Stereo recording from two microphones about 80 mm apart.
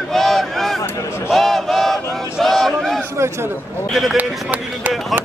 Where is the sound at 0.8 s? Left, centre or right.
Left.